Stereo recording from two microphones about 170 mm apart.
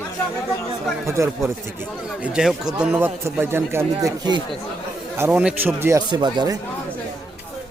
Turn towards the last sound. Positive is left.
turn(degrees=-25)  # may be behind; listen again after turning